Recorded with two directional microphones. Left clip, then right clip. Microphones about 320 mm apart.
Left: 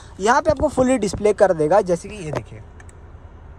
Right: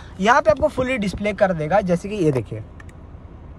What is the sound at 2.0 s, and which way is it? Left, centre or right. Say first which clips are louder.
Speech: right 12 dB; right.